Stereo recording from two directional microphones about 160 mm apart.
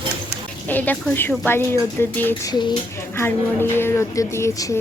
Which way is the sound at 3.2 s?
15° left (ahead or behind).